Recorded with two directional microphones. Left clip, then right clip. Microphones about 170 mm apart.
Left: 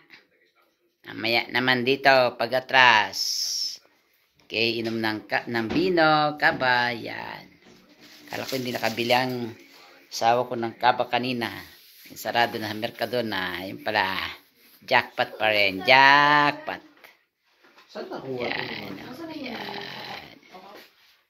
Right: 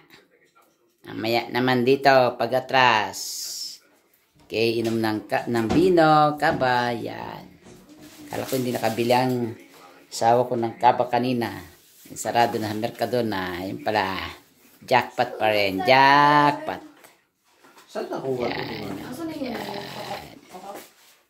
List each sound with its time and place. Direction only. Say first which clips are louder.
1.0 s speech: even; 10° right (ahead or behind)
4.5 s speech: right 2 dB; 5° right (ahead or behind)
10.0 s speech: right 2 dB; 20° right (ahead or behind)
10.4 s speech: right 3 dB; centre (ahead or behind)
18.4 s speech: right 1 dB; 10° right (ahead or behind)
19.4 s snoring: even; 10° right (ahead or behind)